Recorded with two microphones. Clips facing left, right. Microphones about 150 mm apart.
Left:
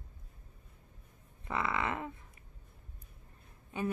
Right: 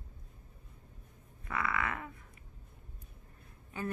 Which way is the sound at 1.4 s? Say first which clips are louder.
Left 1 dB; 25° left (ahead or behind).